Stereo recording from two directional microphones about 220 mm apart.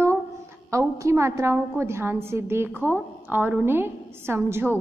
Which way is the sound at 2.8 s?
10° left (ahead or behind).